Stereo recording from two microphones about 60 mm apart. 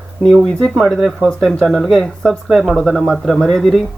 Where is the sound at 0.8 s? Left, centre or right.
Centre.